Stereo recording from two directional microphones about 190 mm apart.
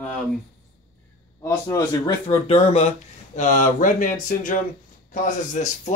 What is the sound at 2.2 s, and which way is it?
Speech, 30° left (ahead or behind).